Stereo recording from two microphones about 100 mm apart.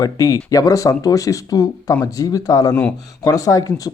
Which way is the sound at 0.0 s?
35° left (ahead or behind).